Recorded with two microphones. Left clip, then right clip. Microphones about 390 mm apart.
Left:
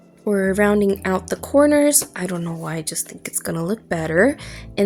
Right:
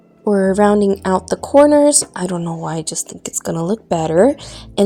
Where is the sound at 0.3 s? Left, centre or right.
Left.